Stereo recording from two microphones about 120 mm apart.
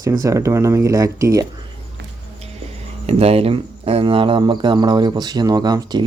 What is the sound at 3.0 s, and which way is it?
Speech, 55° right (ahead or behind).